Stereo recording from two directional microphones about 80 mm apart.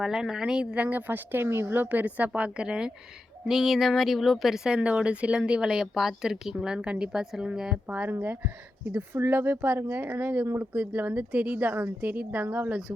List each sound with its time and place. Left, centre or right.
0.0 s speech: centre
8.9 s a woman's voice: right